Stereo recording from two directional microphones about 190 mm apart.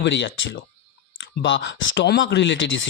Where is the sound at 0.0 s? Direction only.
70° left (ahead or behind).